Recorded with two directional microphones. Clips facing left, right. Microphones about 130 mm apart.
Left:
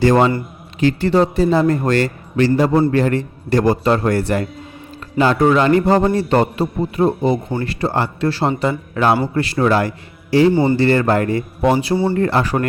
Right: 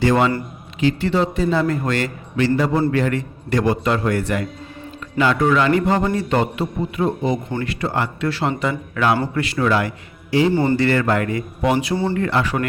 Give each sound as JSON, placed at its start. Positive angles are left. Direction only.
{"t": 0.0, "sound": "a man's voice", "side_deg": 35}
{"t": 10.5, "sound": "a man's voice", "side_deg": 15}
{"t": 10.8, "sound": "a man's voice", "side_deg": 30}